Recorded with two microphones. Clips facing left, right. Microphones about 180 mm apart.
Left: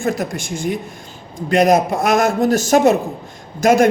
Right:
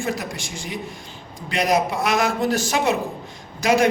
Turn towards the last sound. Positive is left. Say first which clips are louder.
# left 6 dB
turn(degrees=50)  # may be behind; listen again after turning